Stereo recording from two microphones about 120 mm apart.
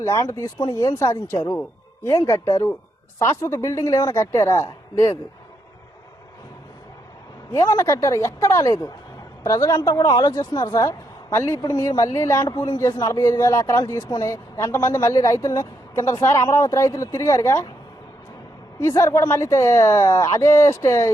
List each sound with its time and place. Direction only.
0.0 s speech: 25° left (ahead or behind)
7.5 s speech: 25° left (ahead or behind)
18.8 s speech: 25° left (ahead or behind)